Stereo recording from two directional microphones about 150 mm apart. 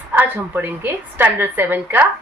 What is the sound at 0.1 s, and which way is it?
Speech, 15° right (ahead or behind).